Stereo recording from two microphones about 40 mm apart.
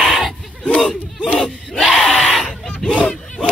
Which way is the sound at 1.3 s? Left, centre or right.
Centre.